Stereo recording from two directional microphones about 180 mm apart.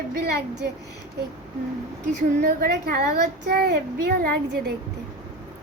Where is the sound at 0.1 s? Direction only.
65° right (ahead or behind).